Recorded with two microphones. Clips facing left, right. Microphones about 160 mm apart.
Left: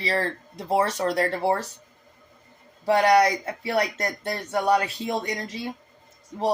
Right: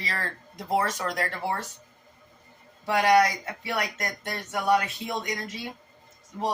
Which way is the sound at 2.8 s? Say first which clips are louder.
Left 3 dB; 35° left (ahead or behind).